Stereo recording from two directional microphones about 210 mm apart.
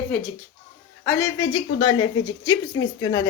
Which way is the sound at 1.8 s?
90° left.